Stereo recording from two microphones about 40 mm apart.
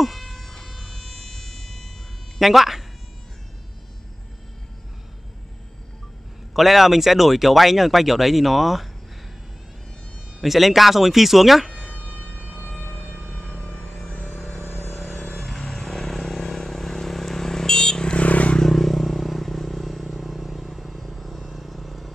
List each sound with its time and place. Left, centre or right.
0.0 s a sound: centre
2.3 s speech: centre
6.5 s speech: centre
10.4 s speech: centre
12.0 s siren: left
13.2 s vehicle: centre
13.8 s music: centre
18.1 s vehicle: left
18.6 s vehicle: centre